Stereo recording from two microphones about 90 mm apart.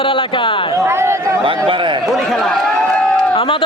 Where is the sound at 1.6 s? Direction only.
65° right (ahead or behind).